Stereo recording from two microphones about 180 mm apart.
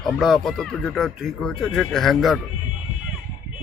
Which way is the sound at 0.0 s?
Centre (ahead or behind).